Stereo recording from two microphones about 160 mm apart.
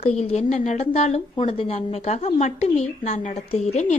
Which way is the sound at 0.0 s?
40° left (ahead or behind).